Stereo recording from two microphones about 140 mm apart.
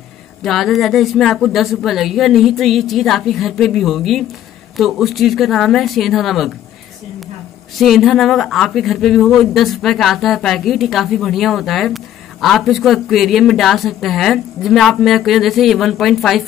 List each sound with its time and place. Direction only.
0.4 s speech: centre (ahead or behind)
7.7 s speech: centre (ahead or behind)